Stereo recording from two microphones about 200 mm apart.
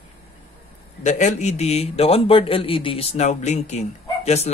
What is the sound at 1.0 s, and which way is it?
A man's voice, 35° left (ahead or behind).